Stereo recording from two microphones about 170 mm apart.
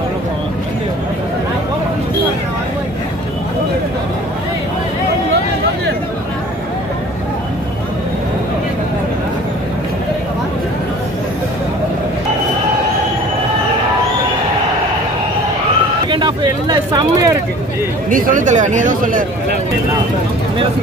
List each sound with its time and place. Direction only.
16.1 s vehicle: 30° right (ahead or behind)
18.1 s speech: 50° right (ahead or behind)